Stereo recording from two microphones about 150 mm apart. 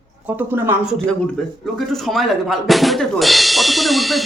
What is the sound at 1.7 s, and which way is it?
Speech, centre (ahead or behind).